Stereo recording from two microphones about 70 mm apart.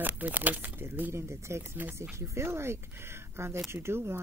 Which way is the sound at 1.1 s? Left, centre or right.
Right.